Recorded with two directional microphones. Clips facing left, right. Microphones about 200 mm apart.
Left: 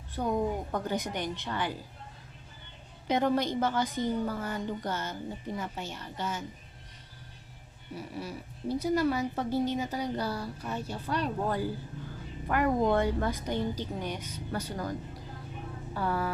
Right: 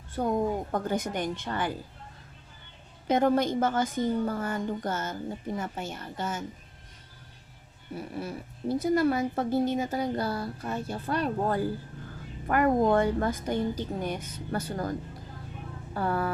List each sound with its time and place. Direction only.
0.2 s a woman's voice: 55° right (ahead or behind)
3.1 s a woman's voice: 50° right (ahead or behind)
7.9 s a woman's voice: 55° right (ahead or behind)
16.0 s a woman's voice: 50° right (ahead or behind)